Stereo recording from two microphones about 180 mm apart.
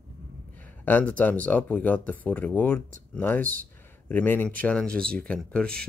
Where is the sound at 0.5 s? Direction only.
10° left (ahead or behind).